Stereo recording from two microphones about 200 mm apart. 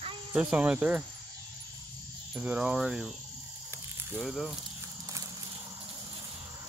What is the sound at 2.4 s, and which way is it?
Cricket, 5° right (ahead or behind).